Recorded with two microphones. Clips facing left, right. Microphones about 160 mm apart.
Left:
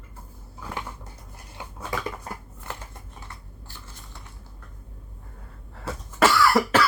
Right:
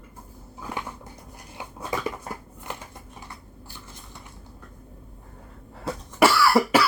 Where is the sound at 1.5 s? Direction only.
20° right (ahead or behind).